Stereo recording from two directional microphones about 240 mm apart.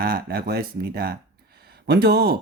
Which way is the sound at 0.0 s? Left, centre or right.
Right.